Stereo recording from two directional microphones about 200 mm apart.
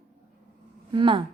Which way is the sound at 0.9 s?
25° right (ahead or behind).